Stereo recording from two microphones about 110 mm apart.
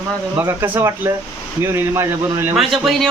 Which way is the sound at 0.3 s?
20° right (ahead or behind).